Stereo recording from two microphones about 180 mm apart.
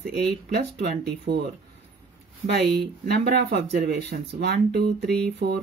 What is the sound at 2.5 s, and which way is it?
A woman's voice, 65° right (ahead or behind).